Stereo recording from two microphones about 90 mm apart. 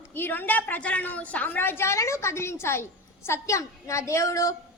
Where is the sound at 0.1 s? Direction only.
20° left (ahead or behind).